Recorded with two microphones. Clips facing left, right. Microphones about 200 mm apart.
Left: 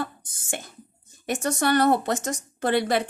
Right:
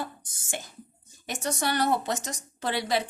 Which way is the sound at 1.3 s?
55° left (ahead or behind).